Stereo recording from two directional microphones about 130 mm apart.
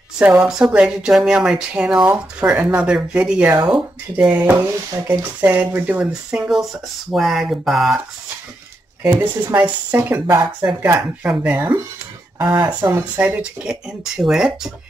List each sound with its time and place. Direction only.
0.2 s speech: 5° right (ahead or behind)
9.6 s speech: 15° right (ahead or behind)
12.9 s speech: 15° right (ahead or behind)